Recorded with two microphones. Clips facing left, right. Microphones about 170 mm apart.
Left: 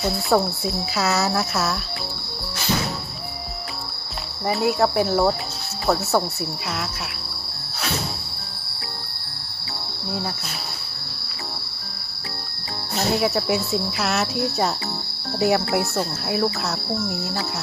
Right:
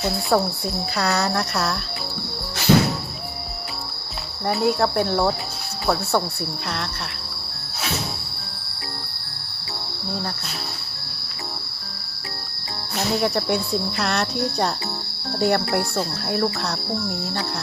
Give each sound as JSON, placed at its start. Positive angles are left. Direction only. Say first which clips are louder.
{"t": 0.0, "sound": "speech", "louder": "left 1 dB", "side_deg": 0}
{"t": 2.7, "sound": "music", "louder": "right 8 dB", "side_deg": -75}
{"t": 4.4, "sound": "speech", "louder": "even", "side_deg": 5}
{"t": 13.1, "sound": "speech", "louder": "right 1 dB", "side_deg": 5}